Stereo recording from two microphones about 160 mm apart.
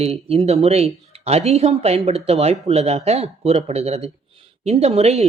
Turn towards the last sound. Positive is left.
turn(degrees=-40)  # may be behind; listen again after turning